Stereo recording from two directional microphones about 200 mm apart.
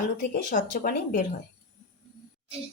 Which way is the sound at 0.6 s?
40° left (ahead or behind).